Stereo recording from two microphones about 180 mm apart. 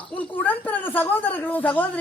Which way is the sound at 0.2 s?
10° left (ahead or behind).